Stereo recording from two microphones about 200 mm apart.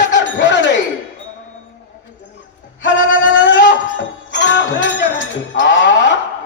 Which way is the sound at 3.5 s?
65° left (ahead or behind).